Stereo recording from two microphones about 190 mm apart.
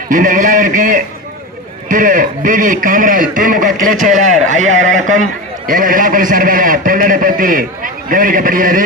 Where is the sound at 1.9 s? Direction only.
45° right (ahead or behind).